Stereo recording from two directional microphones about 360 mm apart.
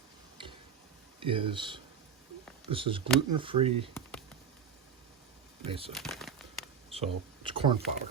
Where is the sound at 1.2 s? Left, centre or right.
Centre.